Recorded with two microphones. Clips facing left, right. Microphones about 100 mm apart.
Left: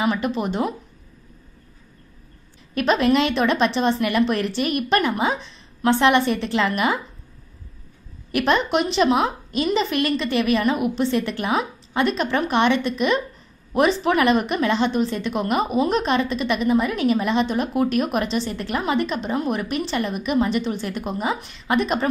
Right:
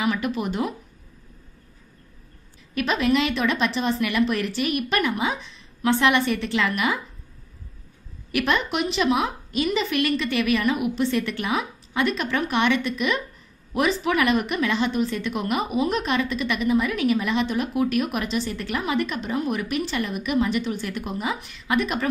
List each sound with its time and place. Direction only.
0.0 s a woman's voice: 30° left (ahead or behind)
2.7 s speech: 40° left (ahead or behind)
8.3 s a woman's voice: 35° left (ahead or behind)